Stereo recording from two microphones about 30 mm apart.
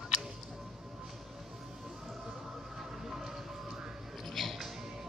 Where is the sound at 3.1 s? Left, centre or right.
Centre.